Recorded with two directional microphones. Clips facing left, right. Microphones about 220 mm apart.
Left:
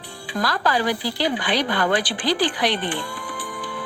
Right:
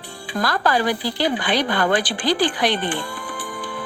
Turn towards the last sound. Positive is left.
turn(degrees=-50)  # may be behind; listen again after turning